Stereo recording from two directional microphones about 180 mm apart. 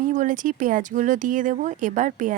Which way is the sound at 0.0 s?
45° right (ahead or behind).